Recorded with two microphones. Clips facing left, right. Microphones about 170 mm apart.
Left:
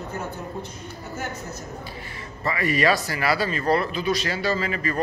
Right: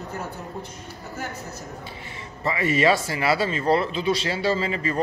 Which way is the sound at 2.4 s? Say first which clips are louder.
Right 1 dB; 25° right (ahead or behind).